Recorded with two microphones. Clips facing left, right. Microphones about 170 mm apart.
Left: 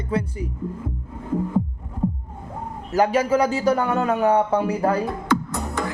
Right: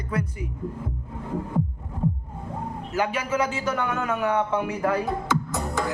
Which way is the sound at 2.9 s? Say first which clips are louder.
Left 8 dB; 40° left (ahead or behind).